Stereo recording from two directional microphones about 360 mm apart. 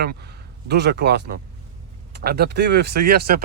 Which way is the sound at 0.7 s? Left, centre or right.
Right.